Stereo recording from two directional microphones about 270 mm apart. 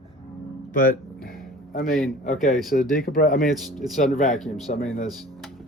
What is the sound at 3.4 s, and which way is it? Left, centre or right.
Speech, centre.